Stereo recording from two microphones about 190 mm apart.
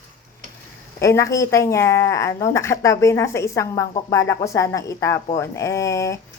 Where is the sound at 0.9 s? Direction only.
15° left (ahead or behind).